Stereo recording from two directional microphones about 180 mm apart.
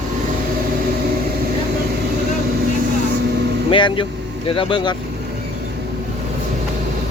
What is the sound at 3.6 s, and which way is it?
Speech, 30° left (ahead or behind).